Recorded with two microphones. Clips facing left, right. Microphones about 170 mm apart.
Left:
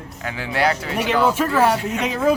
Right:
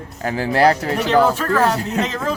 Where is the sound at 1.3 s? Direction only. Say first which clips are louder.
Even; 10° left (ahead or behind).